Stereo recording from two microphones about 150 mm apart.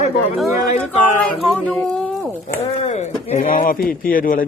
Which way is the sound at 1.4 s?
5° left (ahead or behind).